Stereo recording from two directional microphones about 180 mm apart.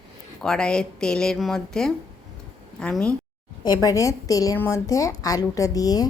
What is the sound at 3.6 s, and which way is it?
A woman's voice, 20° left (ahead or behind).